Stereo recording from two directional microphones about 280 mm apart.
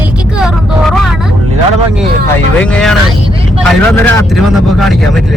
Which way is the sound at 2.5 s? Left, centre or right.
Centre.